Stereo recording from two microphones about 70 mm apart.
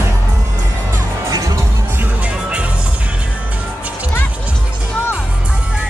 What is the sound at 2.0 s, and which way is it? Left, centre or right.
Music, centre.